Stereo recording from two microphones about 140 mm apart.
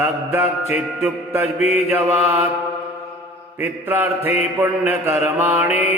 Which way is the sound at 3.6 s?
15° right (ahead or behind).